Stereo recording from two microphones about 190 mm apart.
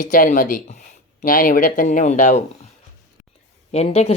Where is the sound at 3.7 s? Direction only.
35° left (ahead or behind).